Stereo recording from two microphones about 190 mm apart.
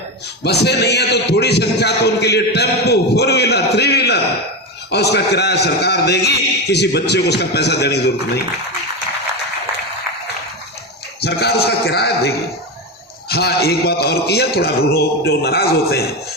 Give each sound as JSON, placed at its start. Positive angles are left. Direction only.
{"t": 0.4, "sound": "a man's voice", "side_deg": 60}
{"t": 11.2, "sound": "a man's voice", "side_deg": 60}